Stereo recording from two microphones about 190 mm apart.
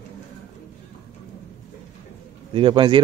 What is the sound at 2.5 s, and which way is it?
Speech, 25° right (ahead or behind).